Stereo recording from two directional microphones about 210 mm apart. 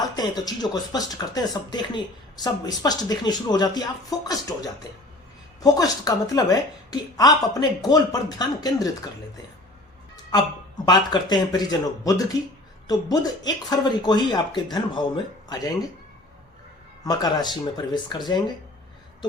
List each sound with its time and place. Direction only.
0.2 s a woman's voice: 20° left (ahead or behind)
10.8 s speech: 20° left (ahead or behind)
17.0 s speech: 20° left (ahead or behind)